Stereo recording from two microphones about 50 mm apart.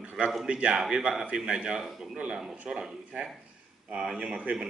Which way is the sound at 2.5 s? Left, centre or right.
Right.